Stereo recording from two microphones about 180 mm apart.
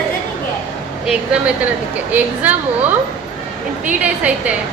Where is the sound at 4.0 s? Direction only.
5° right (ahead or behind).